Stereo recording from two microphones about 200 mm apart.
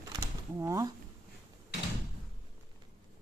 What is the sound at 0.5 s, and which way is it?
Speech, 15° right (ahead or behind).